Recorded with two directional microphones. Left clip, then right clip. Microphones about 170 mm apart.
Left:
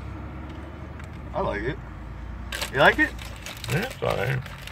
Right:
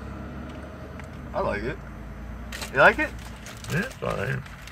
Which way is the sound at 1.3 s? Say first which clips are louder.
Even; 15° right (ahead or behind).